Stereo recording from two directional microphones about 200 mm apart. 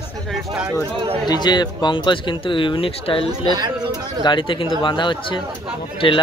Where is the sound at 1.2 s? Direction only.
20° left (ahead or behind).